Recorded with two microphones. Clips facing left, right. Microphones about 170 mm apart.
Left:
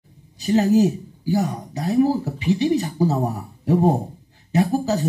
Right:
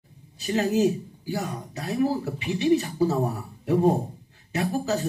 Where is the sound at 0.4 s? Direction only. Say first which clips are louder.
Left 6 dB; 40° left (ahead or behind).